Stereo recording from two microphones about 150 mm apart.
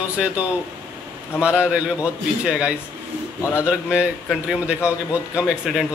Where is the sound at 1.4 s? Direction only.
10° right (ahead or behind).